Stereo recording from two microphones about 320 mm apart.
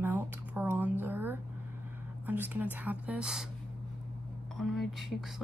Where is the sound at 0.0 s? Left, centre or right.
Centre.